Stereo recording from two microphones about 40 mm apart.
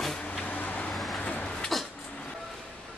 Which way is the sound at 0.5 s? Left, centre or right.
Left.